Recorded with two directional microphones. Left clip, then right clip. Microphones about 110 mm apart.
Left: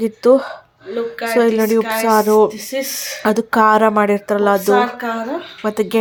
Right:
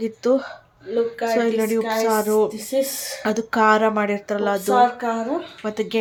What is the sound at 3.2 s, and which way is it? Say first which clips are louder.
Speech: left 5 dB; 35° left (ahead or behind).